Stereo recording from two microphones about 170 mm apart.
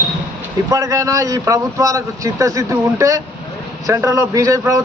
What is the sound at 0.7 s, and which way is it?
A man's voice, 20° right (ahead or behind).